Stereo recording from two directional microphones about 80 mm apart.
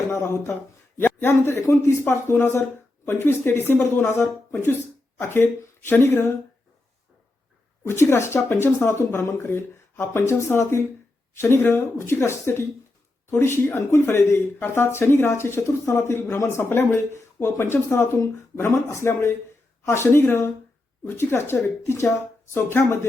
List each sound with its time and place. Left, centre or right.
0.1 s speech: left
7.9 s speech: left